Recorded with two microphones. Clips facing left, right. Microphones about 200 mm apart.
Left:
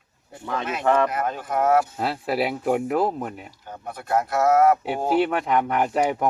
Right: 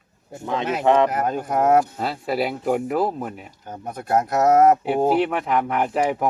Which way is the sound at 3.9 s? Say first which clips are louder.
Right 2 dB; 45° right (ahead or behind).